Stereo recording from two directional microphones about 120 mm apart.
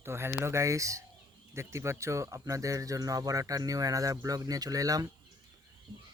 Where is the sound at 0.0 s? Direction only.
20° right (ahead or behind).